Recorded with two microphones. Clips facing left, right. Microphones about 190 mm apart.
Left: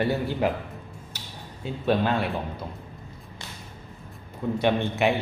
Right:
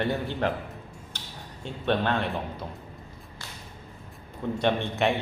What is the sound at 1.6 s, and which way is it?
A man's voice, 5° left (ahead or behind).